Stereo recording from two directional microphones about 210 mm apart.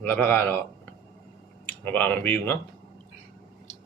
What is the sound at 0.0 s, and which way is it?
Speech, 10° left (ahead or behind).